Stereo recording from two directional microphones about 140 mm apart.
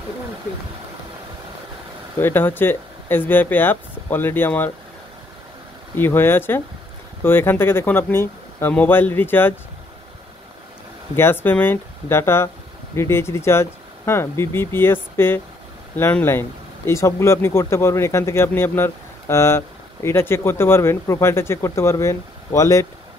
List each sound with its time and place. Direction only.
2.1 s speech: 15° left (ahead or behind)
5.9 s speech: 15° left (ahead or behind)
11.1 s speech: 15° left (ahead or behind)